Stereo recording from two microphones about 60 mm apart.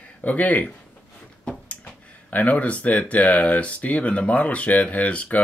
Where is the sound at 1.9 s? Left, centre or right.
Left.